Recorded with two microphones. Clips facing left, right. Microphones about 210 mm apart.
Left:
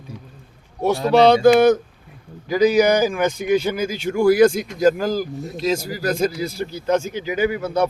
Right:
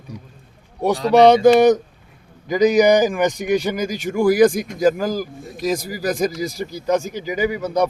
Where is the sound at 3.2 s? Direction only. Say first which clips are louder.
Even; 15° right (ahead or behind).